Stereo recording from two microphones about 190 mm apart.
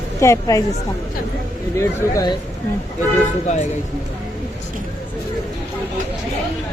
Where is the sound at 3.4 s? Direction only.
35° left (ahead or behind).